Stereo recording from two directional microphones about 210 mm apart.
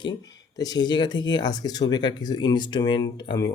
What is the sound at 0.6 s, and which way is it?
Speech, 20° left (ahead or behind).